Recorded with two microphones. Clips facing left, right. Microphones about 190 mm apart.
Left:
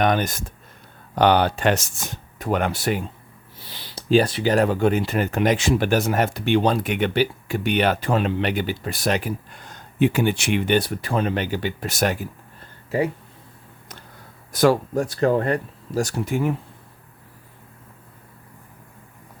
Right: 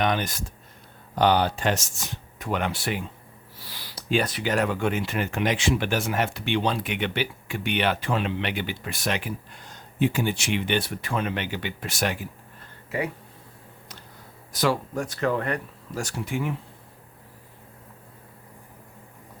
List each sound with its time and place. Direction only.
0.0 s speech: 45° left (ahead or behind)
1.1 s speech: 65° left (ahead or behind)
2.4 s speech: 45° left (ahead or behind)
3.6 s speech: 20° left (ahead or behind); by 12.3 s 40° left (ahead or behind)
14.5 s speech: 50° left (ahead or behind)
14.9 s speech: 35° left (ahead or behind)